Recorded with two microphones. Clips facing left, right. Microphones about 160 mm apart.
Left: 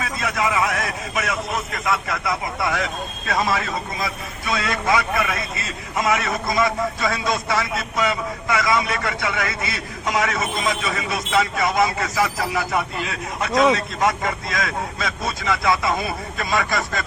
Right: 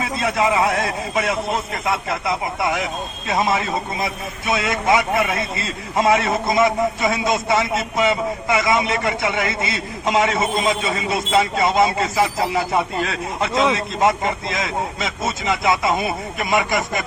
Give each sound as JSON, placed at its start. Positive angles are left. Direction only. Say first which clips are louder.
{"t": 0.0, "sound": "a man's voice", "louder": "right 4 dB", "side_deg": -25}